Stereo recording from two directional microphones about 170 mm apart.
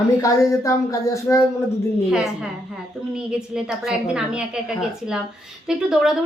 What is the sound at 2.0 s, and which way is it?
Speech, 5° right (ahead or behind).